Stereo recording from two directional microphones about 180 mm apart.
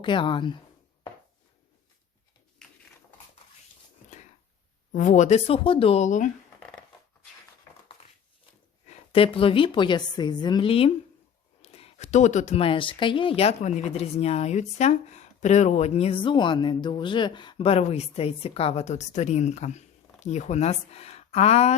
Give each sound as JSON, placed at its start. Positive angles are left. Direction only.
{"t": 0.0, "sound": "a woman's voice", "side_deg": 25}
{"t": 4.1, "sound": "a sound", "side_deg": 40}
{"t": 4.9, "sound": "speech", "side_deg": 45}
{"t": 8.9, "sound": "a woman's voice", "side_deg": 30}